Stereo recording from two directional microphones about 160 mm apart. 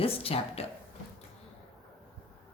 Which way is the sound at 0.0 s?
35° left (ahead or behind).